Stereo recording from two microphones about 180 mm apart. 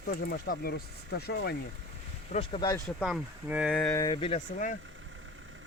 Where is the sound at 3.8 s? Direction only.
15° left (ahead or behind).